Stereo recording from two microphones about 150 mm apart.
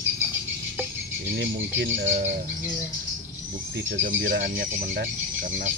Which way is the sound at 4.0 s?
85° right.